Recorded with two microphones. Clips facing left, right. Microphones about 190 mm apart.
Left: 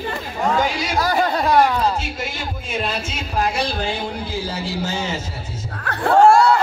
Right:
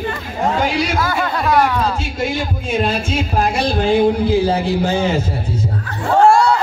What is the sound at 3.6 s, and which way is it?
A man's voice, 55° right (ahead or behind).